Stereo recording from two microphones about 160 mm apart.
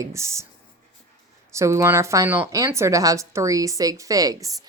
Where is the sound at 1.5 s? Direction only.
20° right (ahead or behind).